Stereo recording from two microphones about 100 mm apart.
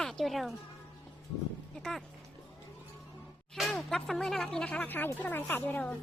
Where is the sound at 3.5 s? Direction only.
5° left (ahead or behind).